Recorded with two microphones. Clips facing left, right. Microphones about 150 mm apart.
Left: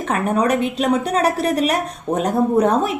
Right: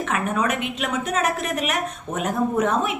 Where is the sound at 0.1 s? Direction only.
35° left (ahead or behind).